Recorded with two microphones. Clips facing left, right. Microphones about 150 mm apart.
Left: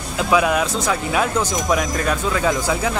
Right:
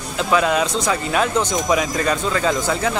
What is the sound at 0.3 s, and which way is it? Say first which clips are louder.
Speech: even; 10° left (ahead or behind).